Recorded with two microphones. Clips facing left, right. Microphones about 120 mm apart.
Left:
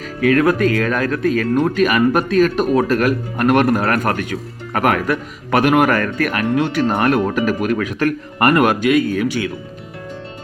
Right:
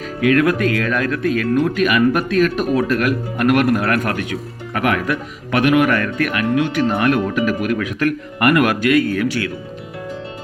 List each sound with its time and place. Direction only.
0.2 s speech: 35° left (ahead or behind); by 9.5 s 15° left (ahead or behind)